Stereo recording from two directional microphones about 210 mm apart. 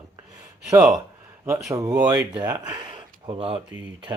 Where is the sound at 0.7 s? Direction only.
5° right (ahead or behind); by 3.6 s 25° right (ahead or behind).